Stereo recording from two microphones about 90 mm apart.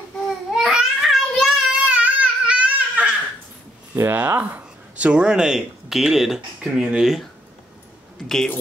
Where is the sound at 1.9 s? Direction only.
15° right (ahead or behind).